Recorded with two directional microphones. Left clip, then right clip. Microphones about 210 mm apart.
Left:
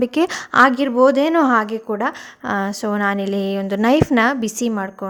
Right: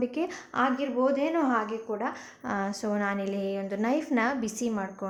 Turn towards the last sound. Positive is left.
turn(degrees=35)  # may be behind; listen again after turning